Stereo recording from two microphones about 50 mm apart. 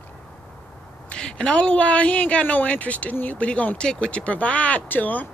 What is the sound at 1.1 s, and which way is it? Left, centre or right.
A man's voice, centre.